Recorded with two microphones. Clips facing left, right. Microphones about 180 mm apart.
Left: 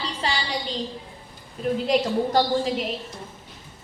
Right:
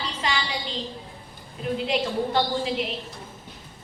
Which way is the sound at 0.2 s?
35° left (ahead or behind).